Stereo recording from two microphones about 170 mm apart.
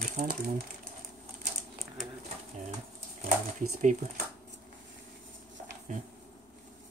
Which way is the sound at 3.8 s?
50° right (ahead or behind).